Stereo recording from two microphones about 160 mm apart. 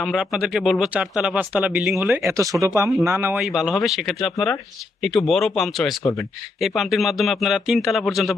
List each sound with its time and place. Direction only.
0.0 s speech: centre (ahead or behind)
3.3 s speech: 5° right (ahead or behind)
6.0 s speech: 20° left (ahead or behind)
6.6 s speech: centre (ahead or behind)